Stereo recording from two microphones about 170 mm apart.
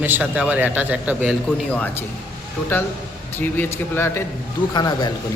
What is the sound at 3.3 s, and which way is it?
Speech, 10° left (ahead or behind).